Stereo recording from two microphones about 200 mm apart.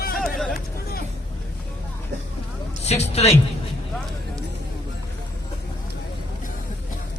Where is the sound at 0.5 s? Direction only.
50° left (ahead or behind).